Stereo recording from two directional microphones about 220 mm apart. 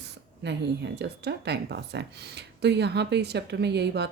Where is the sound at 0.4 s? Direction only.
50° right (ahead or behind).